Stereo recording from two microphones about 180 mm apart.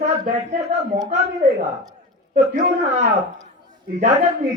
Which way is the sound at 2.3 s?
40° right (ahead or behind).